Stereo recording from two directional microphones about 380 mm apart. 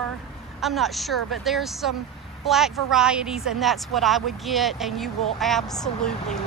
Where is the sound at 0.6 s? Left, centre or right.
Centre.